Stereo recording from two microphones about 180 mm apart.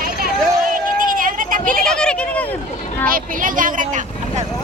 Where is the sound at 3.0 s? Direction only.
50° right (ahead or behind).